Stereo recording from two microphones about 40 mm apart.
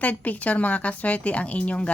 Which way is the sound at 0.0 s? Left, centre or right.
Left.